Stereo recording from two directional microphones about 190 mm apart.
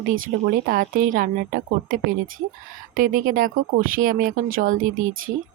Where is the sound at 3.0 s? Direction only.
45° right (ahead or behind).